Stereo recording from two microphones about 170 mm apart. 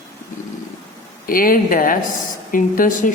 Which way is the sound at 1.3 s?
55° left (ahead or behind).